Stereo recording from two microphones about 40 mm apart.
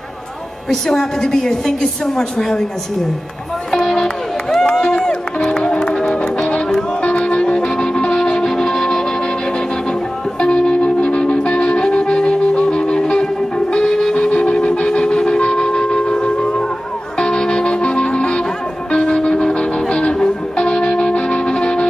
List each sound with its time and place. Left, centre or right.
0.7 s a woman's voice: centre
3.7 s music: centre
7.0 s music: left; by 9.0 s centre
10.4 s music: left
14.1 s wind instrument: left
17.2 s music: centre